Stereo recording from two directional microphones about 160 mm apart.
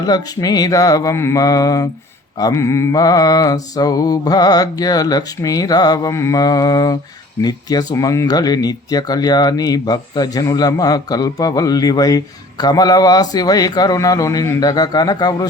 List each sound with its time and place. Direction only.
0.0 s speech: 25° left (ahead or behind)